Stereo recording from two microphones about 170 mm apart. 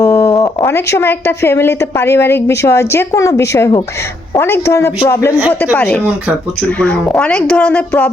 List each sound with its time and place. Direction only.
0.0 s speech: 15° left (ahead or behind)